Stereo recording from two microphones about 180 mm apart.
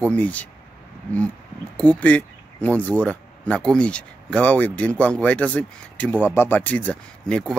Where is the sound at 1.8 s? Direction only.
10° left (ahead or behind).